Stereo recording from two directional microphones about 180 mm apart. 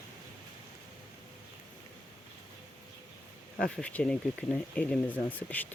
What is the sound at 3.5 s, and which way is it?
Speech, 5° left (ahead or behind).